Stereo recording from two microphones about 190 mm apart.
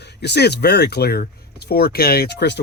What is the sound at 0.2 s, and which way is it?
Speech, 60° left (ahead or behind).